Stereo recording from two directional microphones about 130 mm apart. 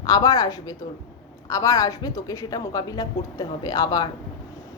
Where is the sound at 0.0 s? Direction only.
30° left (ahead or behind).